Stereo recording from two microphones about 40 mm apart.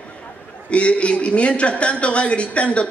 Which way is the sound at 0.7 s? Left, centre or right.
Left.